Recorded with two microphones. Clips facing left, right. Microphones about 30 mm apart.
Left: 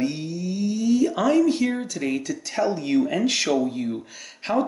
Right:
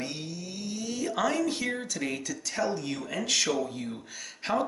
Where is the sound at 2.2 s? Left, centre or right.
Left.